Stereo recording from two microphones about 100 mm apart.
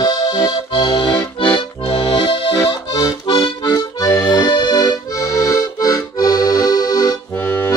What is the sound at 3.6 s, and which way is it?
Music, 35° left (ahead or behind).